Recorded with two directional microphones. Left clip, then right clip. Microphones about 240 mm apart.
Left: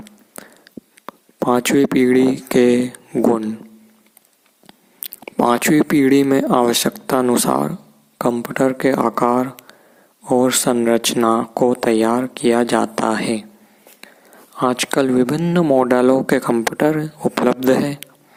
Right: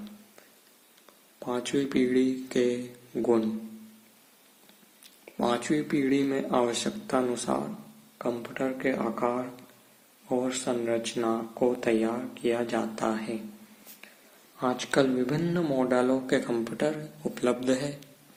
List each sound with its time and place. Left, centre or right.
1.0 s speech: left
4.6 s speech: left
14.5 s speech: left